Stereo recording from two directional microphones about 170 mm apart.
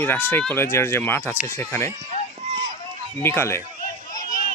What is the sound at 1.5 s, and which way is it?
Speech, 15° left (ahead or behind).